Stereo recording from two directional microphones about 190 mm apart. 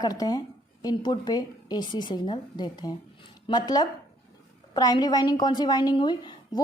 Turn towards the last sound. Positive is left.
turn(degrees=25)  # may be behind; listen again after turning